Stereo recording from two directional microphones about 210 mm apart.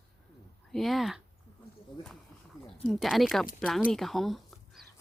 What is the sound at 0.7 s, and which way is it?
Speech, centre (ahead or behind).